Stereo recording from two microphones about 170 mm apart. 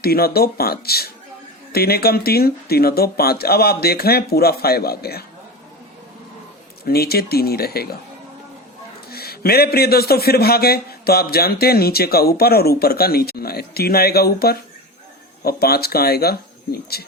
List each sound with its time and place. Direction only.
0.0 s a man's voice: 65° left (ahead or behind)
6.8 s a man's voice: 65° left (ahead or behind)
9.0 s a man's voice: 65° left (ahead or behind)